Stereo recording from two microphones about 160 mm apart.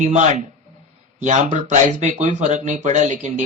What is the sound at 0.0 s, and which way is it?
Speech, 45° right (ahead or behind).